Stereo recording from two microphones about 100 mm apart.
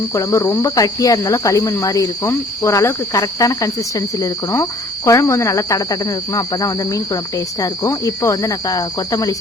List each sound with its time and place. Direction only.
0.1 s speech: 30° left (ahead or behind)
5.0 s speech: 35° left (ahead or behind)